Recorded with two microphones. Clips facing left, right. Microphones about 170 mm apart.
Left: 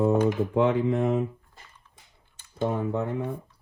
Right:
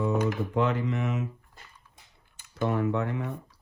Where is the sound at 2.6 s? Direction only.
75° right (ahead or behind).